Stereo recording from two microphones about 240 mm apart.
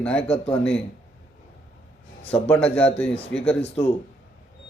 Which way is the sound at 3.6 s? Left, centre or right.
Left.